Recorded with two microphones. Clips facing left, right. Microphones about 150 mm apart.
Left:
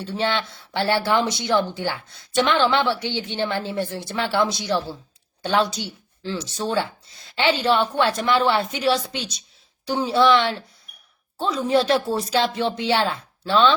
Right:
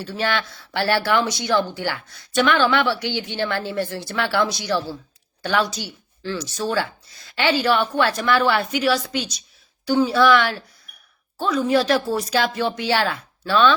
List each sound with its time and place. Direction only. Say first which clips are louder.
0.0 s speech: even; 25° left (ahead or behind)